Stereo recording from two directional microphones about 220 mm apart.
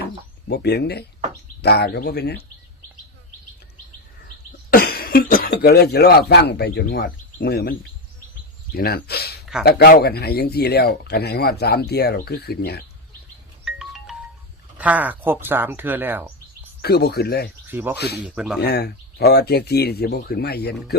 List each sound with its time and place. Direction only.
0.0 s speech: 50° left (ahead or behind)
4.7 s speech: 45° left (ahead or behind)
13.7 s music: centre (ahead or behind)
14.8 s speech: 5° right (ahead or behind)
16.8 s speech: 45° left (ahead or behind)
17.7 s speech: 10° right (ahead or behind)
17.9 s speech: 45° left (ahead or behind)
18.2 s speech: 5° right (ahead or behind)
18.6 s speech: 45° left (ahead or behind)